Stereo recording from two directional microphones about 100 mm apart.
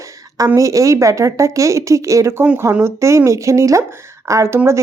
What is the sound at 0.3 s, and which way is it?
A woman's voice, 35° right (ahead or behind).